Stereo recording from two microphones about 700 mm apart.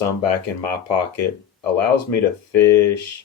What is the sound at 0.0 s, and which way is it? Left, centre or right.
Speech, left.